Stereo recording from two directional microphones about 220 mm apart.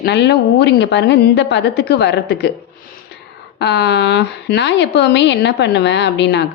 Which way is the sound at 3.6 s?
50° left (ahead or behind).